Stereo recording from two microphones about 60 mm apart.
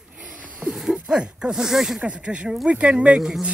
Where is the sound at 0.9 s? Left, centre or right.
Centre.